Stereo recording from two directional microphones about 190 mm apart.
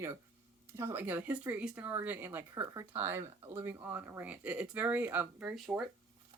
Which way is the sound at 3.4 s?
25° right (ahead or behind).